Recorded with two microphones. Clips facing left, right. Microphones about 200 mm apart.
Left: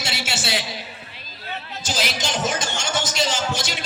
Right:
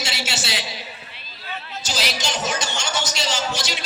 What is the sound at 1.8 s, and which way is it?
Music, 50° left (ahead or behind).